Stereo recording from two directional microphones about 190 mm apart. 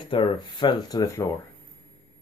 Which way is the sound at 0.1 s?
25° left (ahead or behind).